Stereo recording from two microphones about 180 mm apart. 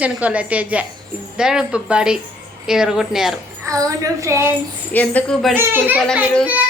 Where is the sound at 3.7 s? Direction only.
20° right (ahead or behind).